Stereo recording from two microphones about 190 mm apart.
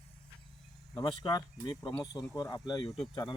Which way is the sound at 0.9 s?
20° left (ahead or behind).